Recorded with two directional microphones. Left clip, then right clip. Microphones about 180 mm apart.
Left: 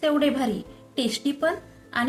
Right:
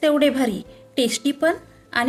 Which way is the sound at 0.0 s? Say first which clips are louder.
Right 5 dB; 55° right (ahead or behind).